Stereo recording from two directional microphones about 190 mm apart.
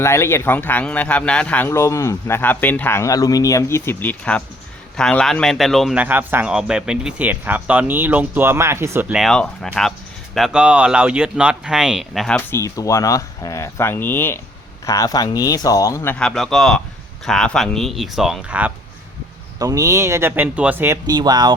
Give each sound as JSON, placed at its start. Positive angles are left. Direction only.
{"t": 0.0, "sound": "a man's voice", "side_deg": 15}
{"t": 12.5, "sound": "a man's voice", "side_deg": 15}
{"t": 19.5, "sound": "speech", "side_deg": -20}